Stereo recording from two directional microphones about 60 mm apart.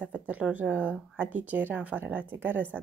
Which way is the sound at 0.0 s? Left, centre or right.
Right.